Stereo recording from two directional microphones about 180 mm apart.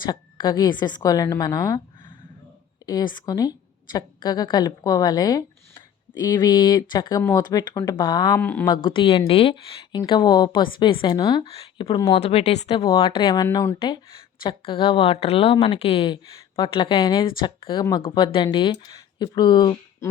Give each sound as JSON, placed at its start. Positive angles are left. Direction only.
{"t": 0.0, "sound": "a woman's voice", "side_deg": 25}
{"t": 8.4, "sound": "speech", "side_deg": 10}
{"t": 8.6, "sound": "speech", "side_deg": 25}